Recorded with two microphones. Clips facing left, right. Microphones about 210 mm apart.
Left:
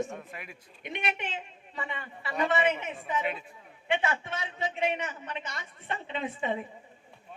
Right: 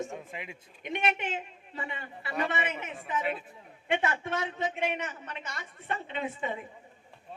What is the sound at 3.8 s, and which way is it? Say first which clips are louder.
Speech: even; 50° right (ahead or behind).